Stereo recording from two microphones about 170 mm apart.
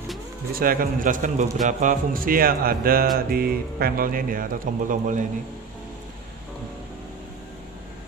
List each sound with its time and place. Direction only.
0.6 s speech: 55° right (ahead or behind)